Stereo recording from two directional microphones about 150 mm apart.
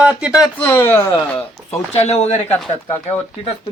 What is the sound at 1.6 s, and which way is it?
Speech, 45° left (ahead or behind).